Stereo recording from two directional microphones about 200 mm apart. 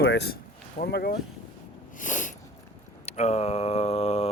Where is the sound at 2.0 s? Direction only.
40° left (ahead or behind).